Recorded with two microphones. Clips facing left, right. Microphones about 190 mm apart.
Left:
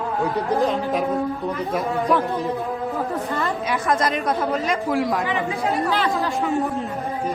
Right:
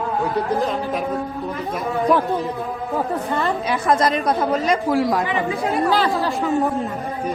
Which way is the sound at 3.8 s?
35° right (ahead or behind).